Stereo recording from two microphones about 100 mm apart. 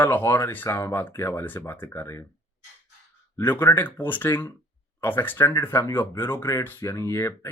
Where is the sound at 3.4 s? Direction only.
20° left (ahead or behind).